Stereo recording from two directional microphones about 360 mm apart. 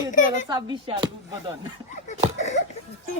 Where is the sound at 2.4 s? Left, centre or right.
Centre.